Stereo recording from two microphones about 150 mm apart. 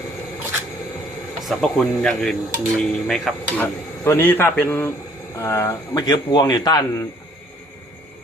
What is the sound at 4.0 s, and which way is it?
A man's voice, 15° left (ahead or behind).